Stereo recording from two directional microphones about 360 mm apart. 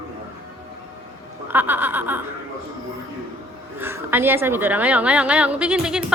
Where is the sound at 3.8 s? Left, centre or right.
Centre.